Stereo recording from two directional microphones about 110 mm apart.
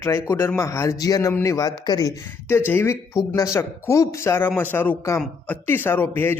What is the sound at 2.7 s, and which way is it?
Speech, 20° left (ahead or behind).